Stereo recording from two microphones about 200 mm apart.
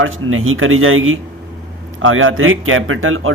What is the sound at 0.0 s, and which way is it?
A man's voice, 85° right.